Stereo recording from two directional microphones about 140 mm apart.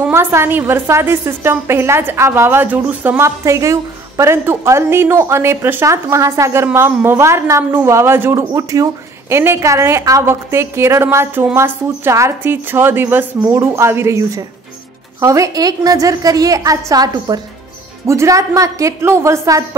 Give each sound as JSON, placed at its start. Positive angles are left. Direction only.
{"t": 0.0, "sound": "a woman's voice", "side_deg": -15}